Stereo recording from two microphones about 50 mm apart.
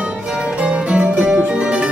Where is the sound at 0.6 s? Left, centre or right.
Right.